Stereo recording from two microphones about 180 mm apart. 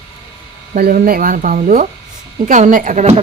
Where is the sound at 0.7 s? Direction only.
50° right (ahead or behind).